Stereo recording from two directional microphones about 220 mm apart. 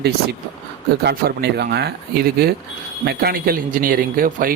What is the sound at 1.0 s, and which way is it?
Speech, 50° right (ahead or behind).